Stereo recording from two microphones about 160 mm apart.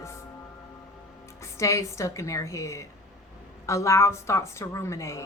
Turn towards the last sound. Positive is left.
turn(degrees=20)  # may be behind; listen again after turning